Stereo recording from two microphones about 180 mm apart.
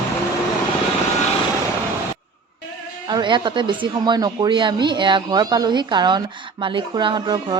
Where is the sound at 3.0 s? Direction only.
25° right (ahead or behind).